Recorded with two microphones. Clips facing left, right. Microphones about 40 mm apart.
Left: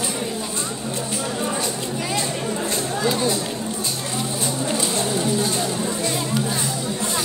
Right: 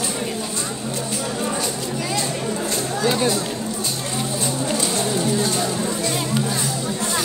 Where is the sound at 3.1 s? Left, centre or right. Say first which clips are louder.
Right 2 dB; right.